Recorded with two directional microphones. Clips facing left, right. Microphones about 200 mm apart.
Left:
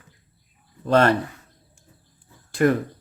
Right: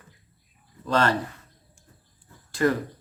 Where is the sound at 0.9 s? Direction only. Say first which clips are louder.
Left 5 dB; 60° left (ahead or behind).